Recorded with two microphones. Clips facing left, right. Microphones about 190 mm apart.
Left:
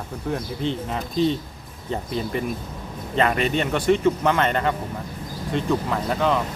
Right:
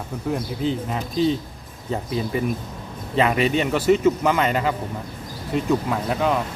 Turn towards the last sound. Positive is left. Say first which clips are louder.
# even
turn(degrees=-5)  # may be behind; listen again after turning